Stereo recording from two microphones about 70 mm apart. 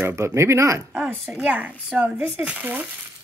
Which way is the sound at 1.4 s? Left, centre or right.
Right.